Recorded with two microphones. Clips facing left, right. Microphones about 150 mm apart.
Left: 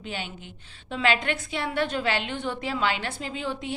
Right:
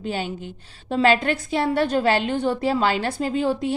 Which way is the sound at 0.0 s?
40° right (ahead or behind).